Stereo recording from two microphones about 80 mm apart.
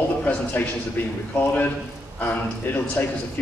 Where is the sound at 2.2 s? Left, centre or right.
Left.